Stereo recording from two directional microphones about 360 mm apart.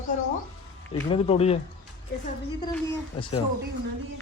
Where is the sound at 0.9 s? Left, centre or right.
Centre.